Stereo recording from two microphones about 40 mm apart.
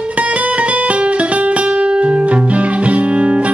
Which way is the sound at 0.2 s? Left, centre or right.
Right.